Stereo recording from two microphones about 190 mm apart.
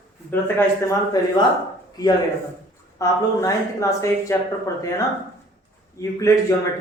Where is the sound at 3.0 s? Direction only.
15° left (ahead or behind).